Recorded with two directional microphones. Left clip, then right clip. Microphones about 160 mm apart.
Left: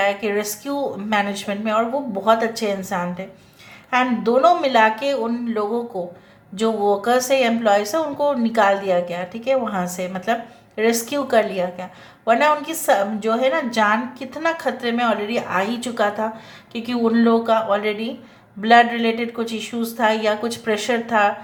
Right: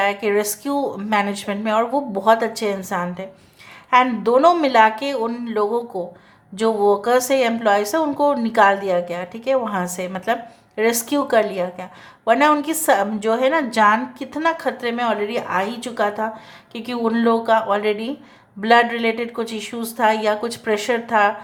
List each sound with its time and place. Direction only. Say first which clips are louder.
0.0 s a woman's voice: right 1 dB; 30° right (ahead or behind)